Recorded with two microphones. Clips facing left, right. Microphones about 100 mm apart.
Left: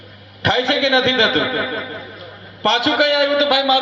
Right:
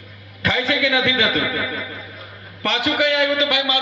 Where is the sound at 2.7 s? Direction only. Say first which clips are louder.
Left 5 dB; 90° left.